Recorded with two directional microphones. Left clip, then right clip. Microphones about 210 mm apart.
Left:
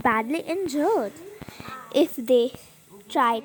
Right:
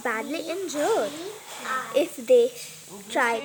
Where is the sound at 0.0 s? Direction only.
35° left (ahead or behind).